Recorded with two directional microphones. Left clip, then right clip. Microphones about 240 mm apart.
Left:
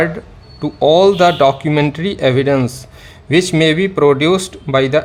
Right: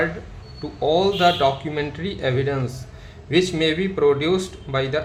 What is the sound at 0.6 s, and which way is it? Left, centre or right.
Speech, left.